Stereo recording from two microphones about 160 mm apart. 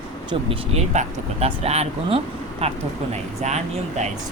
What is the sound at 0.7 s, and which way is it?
Speech, 40° right (ahead or behind).